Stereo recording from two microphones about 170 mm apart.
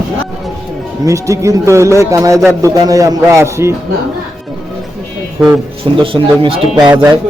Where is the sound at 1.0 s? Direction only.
20° right (ahead or behind).